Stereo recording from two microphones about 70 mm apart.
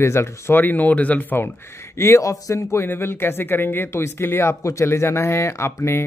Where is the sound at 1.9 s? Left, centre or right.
Left.